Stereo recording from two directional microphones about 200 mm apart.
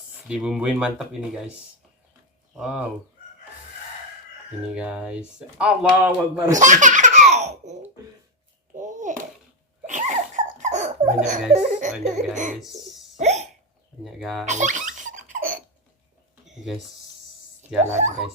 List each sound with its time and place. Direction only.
0.3 s speech: 5° right (ahead or behind)
2.6 s speech: 5° right (ahead or behind)
4.7 s speech: 5° right (ahead or behind)
6.5 s baby laughter: 40° right (ahead or behind)
8.8 s a sound: 40° right (ahead or behind)
11.5 s speech: 40° right (ahead or behind)
13.1 s hiccup: 35° right (ahead or behind)
14.0 s speech: centre (ahead or behind)
14.4 s laughter: 35° right (ahead or behind)
17.8 s speech: 35° right (ahead or behind)